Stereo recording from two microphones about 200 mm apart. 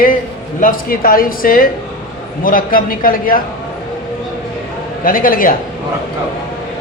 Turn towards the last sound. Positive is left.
turn(degrees=45)  # may be behind; listen again after turning